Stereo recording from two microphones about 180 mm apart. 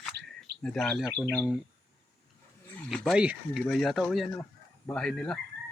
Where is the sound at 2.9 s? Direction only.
Centre (ahead or behind).